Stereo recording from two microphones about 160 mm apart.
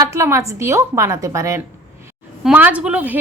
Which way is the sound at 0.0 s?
20° right (ahead or behind).